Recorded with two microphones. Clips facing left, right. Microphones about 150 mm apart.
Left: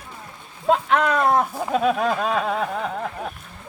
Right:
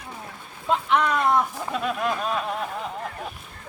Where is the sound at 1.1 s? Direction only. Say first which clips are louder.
Left 2 dB; 45° left (ahead or behind).